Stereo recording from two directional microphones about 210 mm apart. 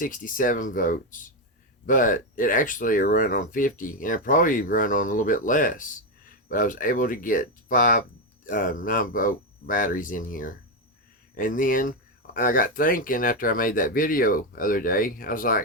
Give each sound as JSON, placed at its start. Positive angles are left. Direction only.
{"t": 0.0, "sound": "speech", "side_deg": 40}